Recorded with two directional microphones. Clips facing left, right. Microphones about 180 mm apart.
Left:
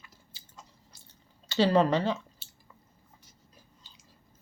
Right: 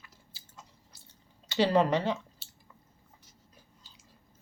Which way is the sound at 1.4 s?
20° right (ahead or behind).